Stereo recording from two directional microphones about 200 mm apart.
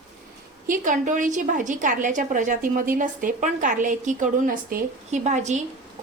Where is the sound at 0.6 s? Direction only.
40° right (ahead or behind).